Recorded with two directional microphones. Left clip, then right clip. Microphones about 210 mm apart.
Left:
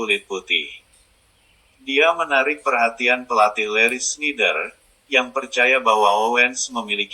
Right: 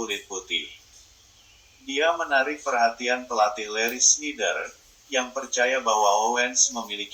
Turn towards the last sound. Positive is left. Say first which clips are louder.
# left 3 dB
turn(degrees=15)  # may be behind; listen again after turning